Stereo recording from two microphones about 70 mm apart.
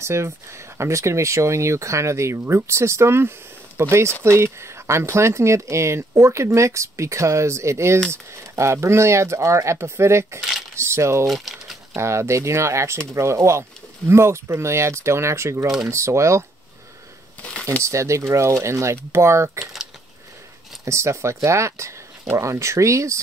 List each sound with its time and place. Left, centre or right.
0.0 s speech: right
11.2 s speech: centre
11.9 s speech: right
17.8 s speech: right
19.6 s boiling: centre
20.8 s speech: right